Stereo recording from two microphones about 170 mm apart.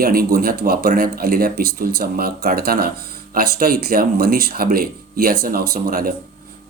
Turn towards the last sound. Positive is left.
turn(degrees=-60)  # may be behind; listen again after turning